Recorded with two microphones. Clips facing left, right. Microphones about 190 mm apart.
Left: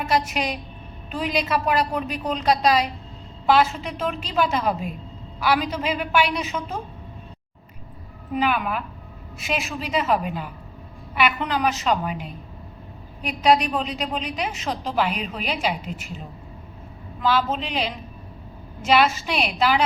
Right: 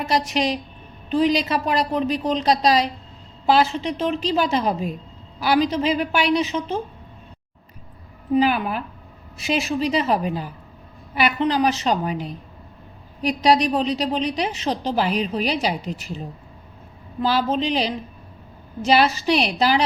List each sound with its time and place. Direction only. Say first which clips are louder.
1.1 s a woman's voice: right 5 dB; 30° right (ahead or behind)
8.4 s a woman's voice: right 3 dB; 35° right (ahead or behind)
17.2 s a woman's voice: right 2 dB; 35° right (ahead or behind)